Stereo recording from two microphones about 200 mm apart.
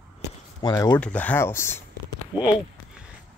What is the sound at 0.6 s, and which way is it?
Speech, 20° left (ahead or behind).